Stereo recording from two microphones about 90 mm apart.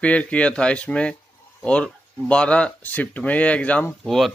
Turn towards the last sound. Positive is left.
turn(degrees=5)  # may be behind; listen again after turning